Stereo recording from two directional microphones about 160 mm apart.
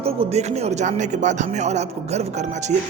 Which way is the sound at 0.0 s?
40° right (ahead or behind).